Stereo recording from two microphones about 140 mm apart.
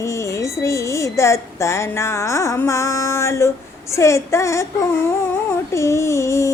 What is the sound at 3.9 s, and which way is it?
Speech, 20° left (ahead or behind).